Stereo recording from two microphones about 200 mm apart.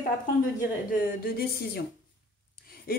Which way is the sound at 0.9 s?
50° left (ahead or behind).